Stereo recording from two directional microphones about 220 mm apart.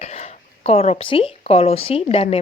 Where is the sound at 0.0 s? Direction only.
30° left (ahead or behind).